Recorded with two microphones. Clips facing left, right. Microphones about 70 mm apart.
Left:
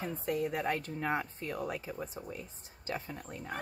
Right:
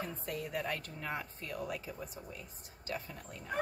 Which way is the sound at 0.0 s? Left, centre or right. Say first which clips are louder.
Left 6 dB; left.